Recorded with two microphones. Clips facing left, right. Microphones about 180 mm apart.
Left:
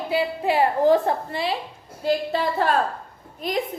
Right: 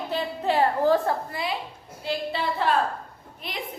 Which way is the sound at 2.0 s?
45° left (ahead or behind).